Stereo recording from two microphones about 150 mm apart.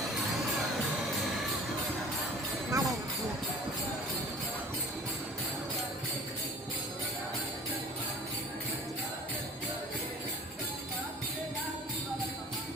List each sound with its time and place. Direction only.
2.6 s jingle bell: 20° right (ahead or behind)